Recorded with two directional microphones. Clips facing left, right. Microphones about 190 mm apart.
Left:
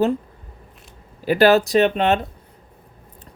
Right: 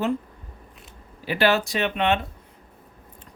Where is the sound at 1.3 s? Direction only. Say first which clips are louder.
Left 7 dB; 40° left (ahead or behind).